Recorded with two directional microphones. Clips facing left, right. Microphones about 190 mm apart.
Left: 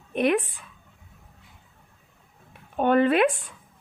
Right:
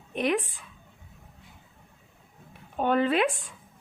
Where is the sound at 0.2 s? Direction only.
60° left (ahead or behind).